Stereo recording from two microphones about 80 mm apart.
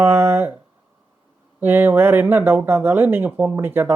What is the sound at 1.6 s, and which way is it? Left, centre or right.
Speech, right.